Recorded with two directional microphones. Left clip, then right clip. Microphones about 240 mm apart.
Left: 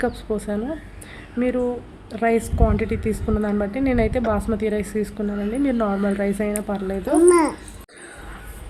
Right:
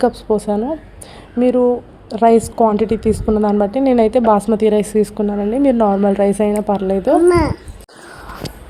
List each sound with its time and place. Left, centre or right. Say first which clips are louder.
0.0 s a woman's voice: right 9 dB; centre
6.5 s speech: right 9 dB; centre
6.7 s a woman's voice: right 8 dB; right
7.2 s speech: right 2 dB; centre